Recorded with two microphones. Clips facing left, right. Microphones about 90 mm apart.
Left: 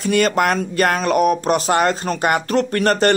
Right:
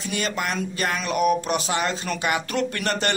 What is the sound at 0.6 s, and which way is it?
Speech, 50° left (ahead or behind).